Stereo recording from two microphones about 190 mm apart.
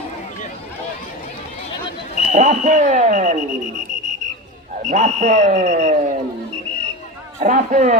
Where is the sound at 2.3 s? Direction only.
40° right (ahead or behind).